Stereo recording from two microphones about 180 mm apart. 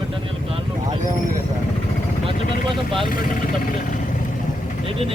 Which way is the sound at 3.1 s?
50° left (ahead or behind).